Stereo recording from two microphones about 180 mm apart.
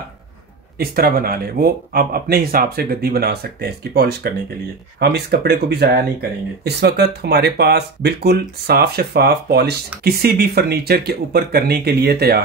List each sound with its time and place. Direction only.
0.7 s speech: 55° right (ahead or behind)